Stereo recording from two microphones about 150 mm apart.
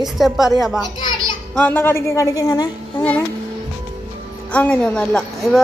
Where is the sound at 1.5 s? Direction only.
10° left (ahead or behind).